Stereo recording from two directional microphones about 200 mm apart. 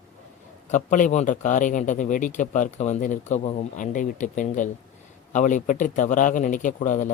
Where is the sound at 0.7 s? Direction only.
40° left (ahead or behind).